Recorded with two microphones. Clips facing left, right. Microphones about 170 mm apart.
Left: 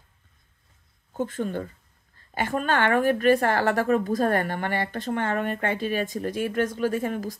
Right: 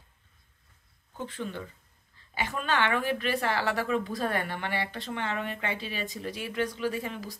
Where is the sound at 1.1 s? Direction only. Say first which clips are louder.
Left 8 dB; 45° left (ahead or behind).